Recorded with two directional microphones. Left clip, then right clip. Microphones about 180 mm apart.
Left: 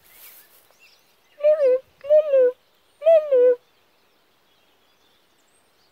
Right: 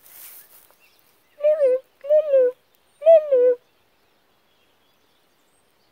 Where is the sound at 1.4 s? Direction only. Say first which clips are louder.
Left 1 dB; 20° left (ahead or behind).